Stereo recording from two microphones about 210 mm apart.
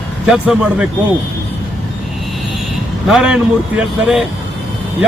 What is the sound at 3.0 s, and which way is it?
Speech, 5° right (ahead or behind).